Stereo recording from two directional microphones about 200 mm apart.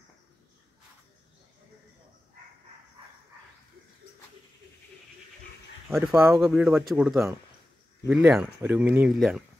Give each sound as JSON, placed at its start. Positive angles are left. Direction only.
{"t": 5.9, "sound": "speech", "side_deg": -5}